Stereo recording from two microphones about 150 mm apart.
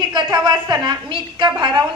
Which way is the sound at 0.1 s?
30° right (ahead or behind).